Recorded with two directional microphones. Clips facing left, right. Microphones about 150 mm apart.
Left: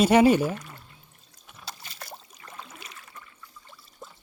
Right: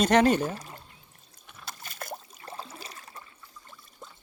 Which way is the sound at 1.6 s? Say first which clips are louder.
Right 2 dB; 50° right (ahead or behind).